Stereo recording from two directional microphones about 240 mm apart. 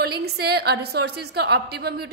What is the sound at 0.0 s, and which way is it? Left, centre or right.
A woman's voice, right.